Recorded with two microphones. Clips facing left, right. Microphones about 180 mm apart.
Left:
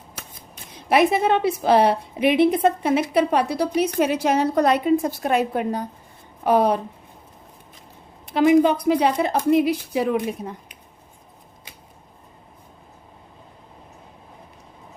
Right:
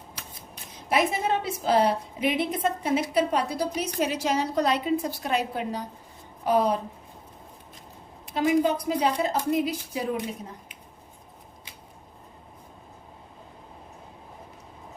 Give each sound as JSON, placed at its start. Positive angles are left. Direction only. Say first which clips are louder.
{"t": 0.9, "sound": "a woman's voice", "louder": "left 7 dB", "side_deg": 70}
{"t": 6.4, "sound": "a woman's voice", "louder": "left 5 dB", "side_deg": 65}
{"t": 8.4, "sound": "a woman's voice", "louder": "left 7 dB", "side_deg": 75}